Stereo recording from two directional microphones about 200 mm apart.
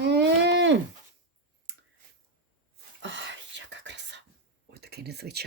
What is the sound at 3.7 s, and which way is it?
Whispering, 60° right (ahead or behind).